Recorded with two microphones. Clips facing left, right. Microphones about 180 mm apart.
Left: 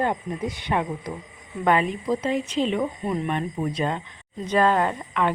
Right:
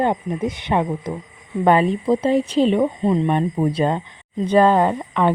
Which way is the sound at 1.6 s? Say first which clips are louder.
Right 6 dB; 30° right (ahead or behind).